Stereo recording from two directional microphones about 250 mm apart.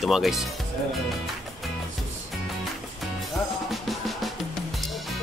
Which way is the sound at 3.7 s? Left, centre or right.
Centre.